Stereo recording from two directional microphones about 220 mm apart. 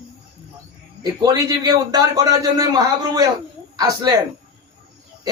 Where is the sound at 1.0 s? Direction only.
15° right (ahead or behind).